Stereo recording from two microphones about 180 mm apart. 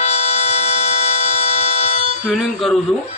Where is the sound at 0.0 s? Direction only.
40° left (ahead or behind).